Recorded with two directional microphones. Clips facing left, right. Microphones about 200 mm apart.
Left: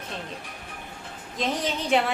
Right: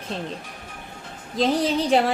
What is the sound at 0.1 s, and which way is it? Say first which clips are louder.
Speech: right 7 dB; 30° right (ahead or behind).